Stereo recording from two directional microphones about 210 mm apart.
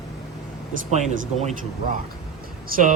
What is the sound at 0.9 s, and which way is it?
Speech, 35° right (ahead or behind).